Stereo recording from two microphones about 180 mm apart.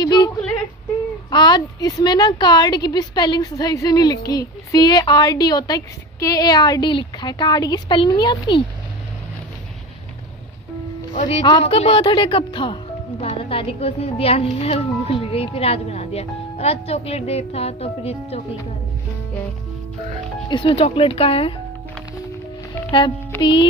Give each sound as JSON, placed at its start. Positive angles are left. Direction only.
{"t": 0.0, "sound": "a sound", "side_deg": 20}
{"t": 1.3, "sound": "a woman's voice", "side_deg": 25}
{"t": 11.1, "sound": "a woman's voice", "side_deg": 35}
{"t": 20.4, "sound": "speech", "side_deg": 25}
{"t": 22.8, "sound": "a child's voice", "side_deg": 25}